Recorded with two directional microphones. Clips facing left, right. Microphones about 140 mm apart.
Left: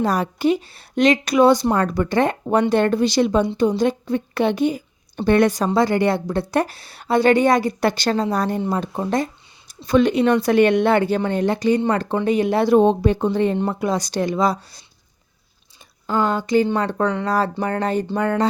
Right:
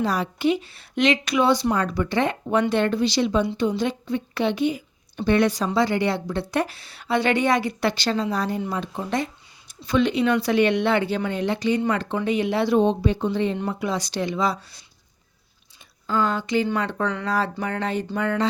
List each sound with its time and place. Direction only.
0.0 s speech: 45° left (ahead or behind)
16.0 s speech: 35° left (ahead or behind)